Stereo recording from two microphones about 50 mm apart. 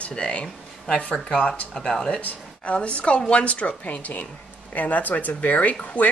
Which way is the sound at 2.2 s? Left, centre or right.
Left.